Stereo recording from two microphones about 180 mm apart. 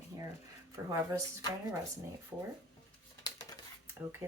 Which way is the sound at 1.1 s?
15° right (ahead or behind).